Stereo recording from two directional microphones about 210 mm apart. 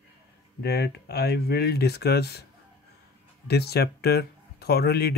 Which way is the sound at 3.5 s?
50° left (ahead or behind).